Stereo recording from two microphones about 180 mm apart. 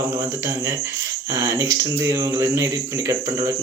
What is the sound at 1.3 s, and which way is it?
Speech, 15° right (ahead or behind).